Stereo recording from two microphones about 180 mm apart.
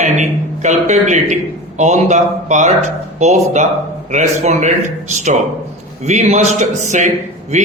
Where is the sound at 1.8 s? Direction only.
40° right (ahead or behind).